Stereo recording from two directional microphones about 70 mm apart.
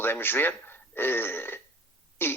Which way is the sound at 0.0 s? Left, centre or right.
Left.